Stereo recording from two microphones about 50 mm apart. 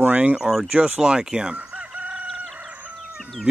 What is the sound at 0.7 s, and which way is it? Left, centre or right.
Chicken, right.